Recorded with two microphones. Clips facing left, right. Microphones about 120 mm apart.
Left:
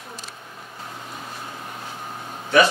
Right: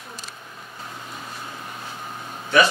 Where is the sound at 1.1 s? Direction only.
30° left (ahead or behind).